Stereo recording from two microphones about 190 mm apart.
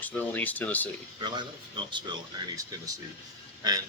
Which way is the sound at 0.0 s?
10° left (ahead or behind).